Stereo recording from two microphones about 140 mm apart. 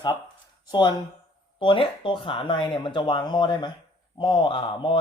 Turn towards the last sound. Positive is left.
turn(degrees=35)  # may be behind; listen again after turning